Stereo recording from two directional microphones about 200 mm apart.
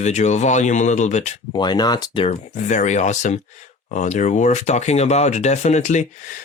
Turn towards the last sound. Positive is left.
turn(degrees=35)  # may be behind; listen again after turning